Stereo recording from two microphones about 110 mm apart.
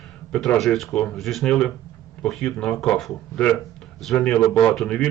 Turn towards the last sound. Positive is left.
turn(degrees=5)  # may be behind; listen again after turning